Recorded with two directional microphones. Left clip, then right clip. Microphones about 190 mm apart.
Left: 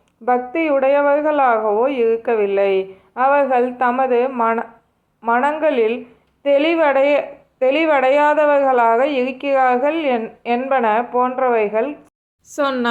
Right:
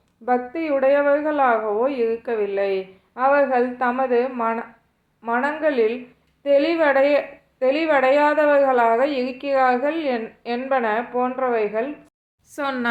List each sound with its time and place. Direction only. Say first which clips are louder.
0.3 s a woman's voice: left 5 dB; 20° left (ahead or behind)